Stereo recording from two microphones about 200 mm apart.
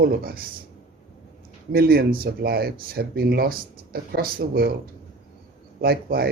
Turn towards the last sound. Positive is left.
turn(degrees=-50)  # may be behind; listen again after turning